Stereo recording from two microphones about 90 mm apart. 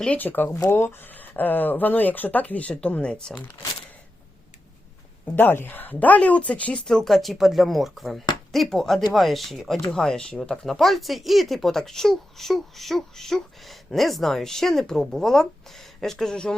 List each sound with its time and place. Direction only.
0.0 s speech: 15° left (ahead or behind)
5.2 s speech: 20° left (ahead or behind)